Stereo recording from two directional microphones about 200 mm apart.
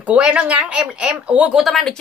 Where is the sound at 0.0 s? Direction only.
5° right (ahead or behind).